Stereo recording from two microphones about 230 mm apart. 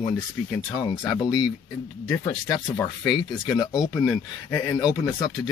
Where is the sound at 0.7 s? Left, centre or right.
Centre.